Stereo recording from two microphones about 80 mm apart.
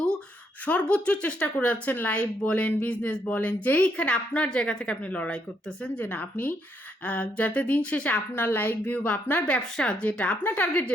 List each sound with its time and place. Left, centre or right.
0.6 s a woman's voice: centre
8.3 s a woman's voice: left